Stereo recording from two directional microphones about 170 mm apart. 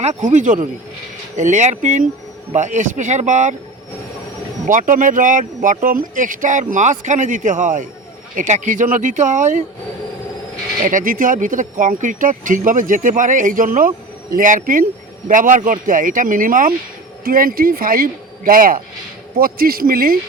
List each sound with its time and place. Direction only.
0.0 s speech: 45° right (ahead or behind)
4.6 s speech: 50° right (ahead or behind)
10.8 s a man's voice: 50° right (ahead or behind)